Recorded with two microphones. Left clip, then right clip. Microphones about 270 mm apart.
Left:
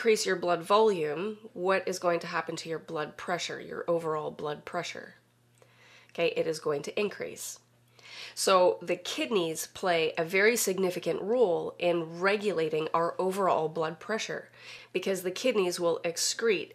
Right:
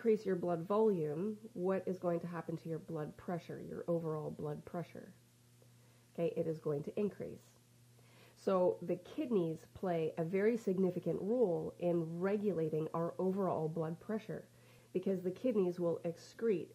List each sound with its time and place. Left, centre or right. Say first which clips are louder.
0.0 s speech: left 8 dB; centre
6.1 s speech: left 9 dB; centre
8.1 s a sound: left 11 dB; centre
8.8 s speech: left 9 dB; centre
11.4 s a woman's voice: left 9 dB; left
11.8 s speech: left 10 dB; centre